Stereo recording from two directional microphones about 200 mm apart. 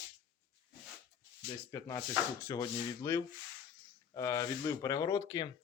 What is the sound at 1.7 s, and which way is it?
A man's voice, 15° left (ahead or behind).